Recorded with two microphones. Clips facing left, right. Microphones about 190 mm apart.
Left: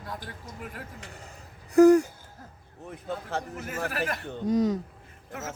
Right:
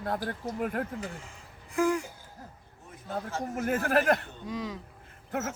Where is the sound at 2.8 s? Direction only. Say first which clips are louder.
Left 7 dB; 65° left (ahead or behind).